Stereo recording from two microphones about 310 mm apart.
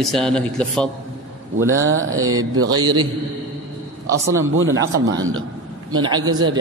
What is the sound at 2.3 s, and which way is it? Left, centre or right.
Speech, right.